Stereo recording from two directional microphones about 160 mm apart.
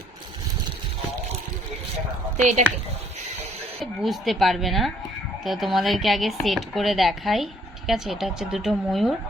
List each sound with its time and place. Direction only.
2.4 s speech: 45° right (ahead or behind)
4.0 s speech: centre (ahead or behind)